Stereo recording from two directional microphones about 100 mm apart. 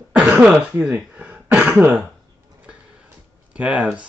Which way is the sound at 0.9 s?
15° right (ahead or behind).